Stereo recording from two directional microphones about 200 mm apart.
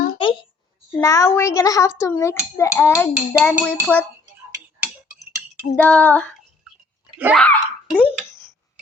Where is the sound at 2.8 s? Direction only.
5° left (ahead or behind).